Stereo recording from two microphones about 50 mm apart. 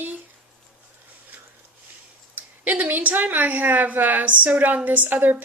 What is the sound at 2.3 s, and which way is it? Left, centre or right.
A woman's voice, right.